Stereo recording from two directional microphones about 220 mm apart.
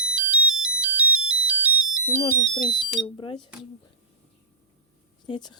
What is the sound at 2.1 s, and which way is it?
Speech, 25° left (ahead or behind).